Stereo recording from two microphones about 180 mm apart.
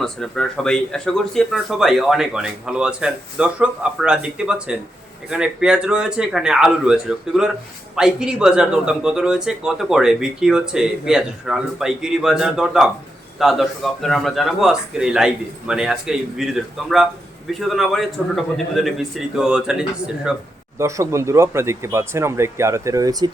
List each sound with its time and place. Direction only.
0.0 s speech: 5° left (ahead or behind)
20.7 s speech: 15° right (ahead or behind)